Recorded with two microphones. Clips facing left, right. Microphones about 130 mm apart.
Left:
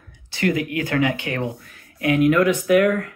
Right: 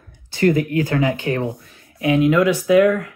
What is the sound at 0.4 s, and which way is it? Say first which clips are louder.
Speech: right 5 dB; 35° right (ahead or behind).